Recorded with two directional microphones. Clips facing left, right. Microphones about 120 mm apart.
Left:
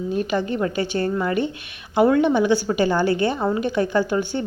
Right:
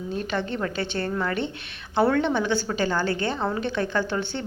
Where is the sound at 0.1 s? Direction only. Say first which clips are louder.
Left 5 dB; 10° left (ahead or behind).